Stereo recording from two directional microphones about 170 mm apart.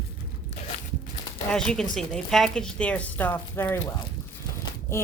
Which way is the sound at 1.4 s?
5° left (ahead or behind).